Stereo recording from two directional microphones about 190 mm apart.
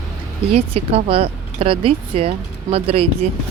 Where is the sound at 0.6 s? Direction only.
30° right (ahead or behind).